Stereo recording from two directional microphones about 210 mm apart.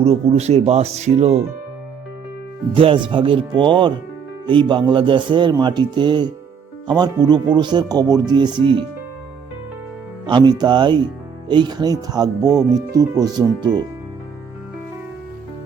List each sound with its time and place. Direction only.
0.0 s speech: 30° right (ahead or behind)
2.7 s speech: 25° right (ahead or behind)
10.2 s speech: 20° right (ahead or behind)